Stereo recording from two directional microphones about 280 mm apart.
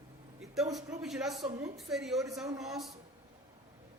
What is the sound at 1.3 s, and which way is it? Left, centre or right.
Speech, centre.